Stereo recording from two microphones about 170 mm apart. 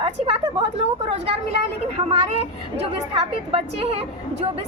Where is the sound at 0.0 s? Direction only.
35° right (ahead or behind).